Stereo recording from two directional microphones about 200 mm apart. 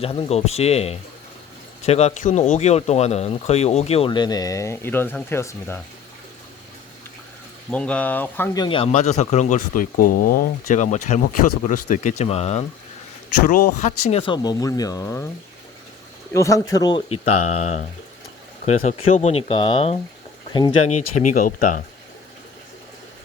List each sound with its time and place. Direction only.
0.0 s speech: 30° left (ahead or behind); by 5.8 s 10° left (ahead or behind)
7.7 s speech: 5° left (ahead or behind)
8.6 s speech: 25° left (ahead or behind)
14.1 s speech: 25° left (ahead or behind)
16.3 s speech: 15° left (ahead or behind)
17.4 s speech: 35° left (ahead or behind)
20.8 s speech: 35° left (ahead or behind)